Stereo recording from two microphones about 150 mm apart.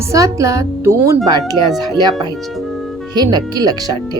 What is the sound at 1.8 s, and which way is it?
A woman's voice, 25° right (ahead or behind).